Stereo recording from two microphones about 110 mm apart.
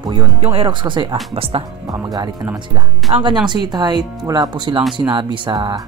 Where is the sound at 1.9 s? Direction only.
35° right (ahead or behind).